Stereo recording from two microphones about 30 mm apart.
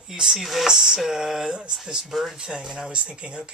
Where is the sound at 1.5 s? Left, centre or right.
Right.